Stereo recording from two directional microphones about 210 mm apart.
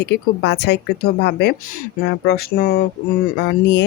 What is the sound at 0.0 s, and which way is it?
Speech, 50° left (ahead or behind).